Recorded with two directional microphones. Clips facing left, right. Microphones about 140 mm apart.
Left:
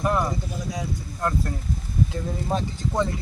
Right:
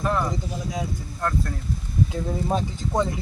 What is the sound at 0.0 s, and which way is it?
Speech, 10° left (ahead or behind).